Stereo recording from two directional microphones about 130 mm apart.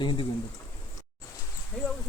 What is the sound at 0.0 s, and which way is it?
Speech, 40° left (ahead or behind).